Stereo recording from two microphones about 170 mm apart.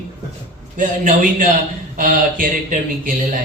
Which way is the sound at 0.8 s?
50° right (ahead or behind).